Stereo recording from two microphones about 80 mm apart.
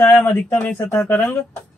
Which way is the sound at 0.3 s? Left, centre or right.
Left.